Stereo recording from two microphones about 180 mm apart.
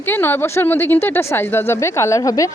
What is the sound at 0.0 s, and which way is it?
Speech, 10° left (ahead or behind).